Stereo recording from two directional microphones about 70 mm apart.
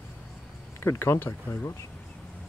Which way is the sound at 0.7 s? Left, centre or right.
Left.